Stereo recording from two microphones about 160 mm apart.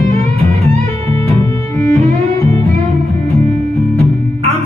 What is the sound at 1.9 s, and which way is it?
Music, 40° right (ahead or behind).